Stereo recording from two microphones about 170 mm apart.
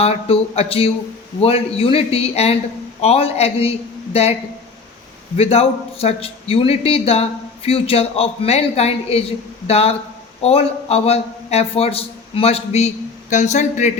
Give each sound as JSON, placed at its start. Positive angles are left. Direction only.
{"t": 0.0, "sound": "speech", "side_deg": 35}
{"t": 5.4, "sound": "speech", "side_deg": 35}